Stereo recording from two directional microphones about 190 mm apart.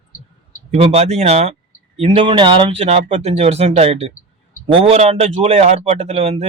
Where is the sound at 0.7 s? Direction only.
35° right (ahead or behind).